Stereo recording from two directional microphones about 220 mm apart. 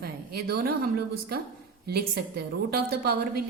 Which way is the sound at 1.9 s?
45° right (ahead or behind).